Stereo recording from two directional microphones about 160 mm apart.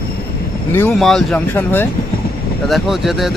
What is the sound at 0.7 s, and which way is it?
Speech, 15° left (ahead or behind).